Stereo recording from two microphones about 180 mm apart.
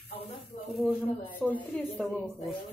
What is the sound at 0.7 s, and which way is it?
A woman's voice, 5° left (ahead or behind).